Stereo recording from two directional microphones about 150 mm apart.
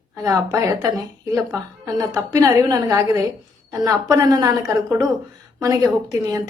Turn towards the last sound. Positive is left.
turn(degrees=-20)  # may be behind; listen again after turning